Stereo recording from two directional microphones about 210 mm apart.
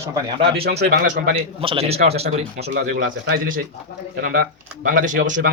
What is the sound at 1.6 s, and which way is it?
Speech, 25° right (ahead or behind).